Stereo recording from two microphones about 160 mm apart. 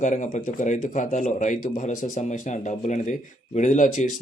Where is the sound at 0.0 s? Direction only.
50° left (ahead or behind).